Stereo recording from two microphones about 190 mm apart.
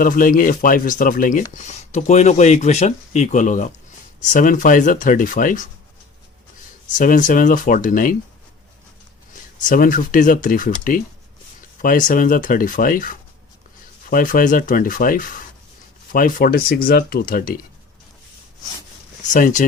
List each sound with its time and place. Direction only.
0.0 s speech: 45° left (ahead or behind)
6.8 s speech: 45° left (ahead or behind)
9.3 s speech: 45° left (ahead or behind)
19.3 s speech: 40° left (ahead or behind)